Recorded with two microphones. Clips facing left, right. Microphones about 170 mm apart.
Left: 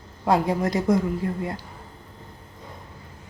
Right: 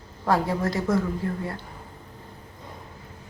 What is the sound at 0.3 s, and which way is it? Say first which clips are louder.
A woman's voice: left 2 dB; 15° left (ahead or behind).